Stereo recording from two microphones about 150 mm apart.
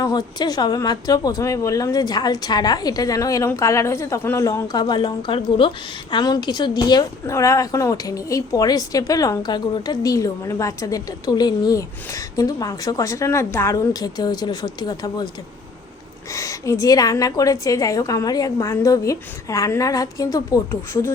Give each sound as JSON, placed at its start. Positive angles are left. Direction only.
{"t": 0.0, "sound": "a woman's voice", "side_deg": 25}
{"t": 16.3, "sound": "a woman's voice", "side_deg": 20}